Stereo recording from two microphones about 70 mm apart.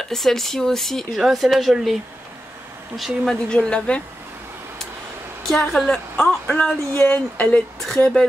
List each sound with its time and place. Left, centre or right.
0.1 s speech: centre
3.3 s a woman's voice: centre
5.5 s a woman's voice: centre